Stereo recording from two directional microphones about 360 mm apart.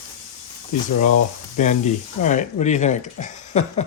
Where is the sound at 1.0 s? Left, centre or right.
Left.